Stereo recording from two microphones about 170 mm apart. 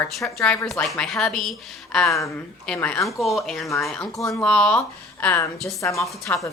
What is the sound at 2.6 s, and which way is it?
A woman's voice, 5° left (ahead or behind).